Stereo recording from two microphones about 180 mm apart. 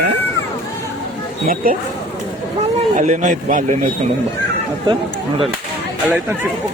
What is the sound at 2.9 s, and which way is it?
Speech, 45° right (ahead or behind).